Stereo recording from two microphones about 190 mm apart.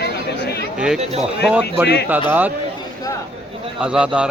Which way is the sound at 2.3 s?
10° right (ahead or behind).